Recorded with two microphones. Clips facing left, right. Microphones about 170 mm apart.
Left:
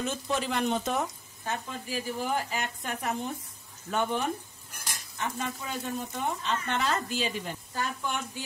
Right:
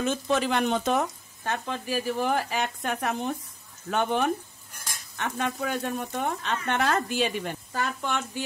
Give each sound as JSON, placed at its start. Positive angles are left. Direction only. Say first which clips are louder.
{"t": 0.0, "sound": "speech", "louder": "right 5 dB", "side_deg": -90}